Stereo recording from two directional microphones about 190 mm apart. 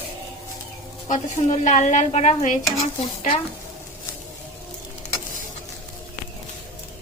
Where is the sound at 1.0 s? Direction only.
40° left (ahead or behind).